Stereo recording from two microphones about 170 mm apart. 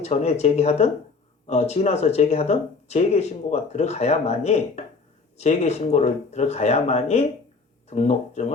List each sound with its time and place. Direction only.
0.0 s speech: 40° left (ahead or behind)